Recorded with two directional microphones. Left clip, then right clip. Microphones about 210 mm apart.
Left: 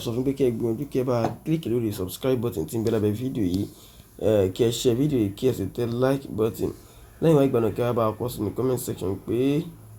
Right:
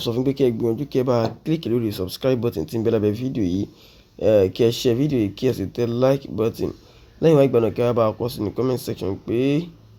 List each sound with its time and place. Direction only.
0.0 s speech: 40° right (ahead or behind)